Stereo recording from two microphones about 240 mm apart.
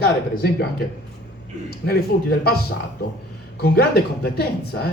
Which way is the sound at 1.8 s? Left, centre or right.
Left.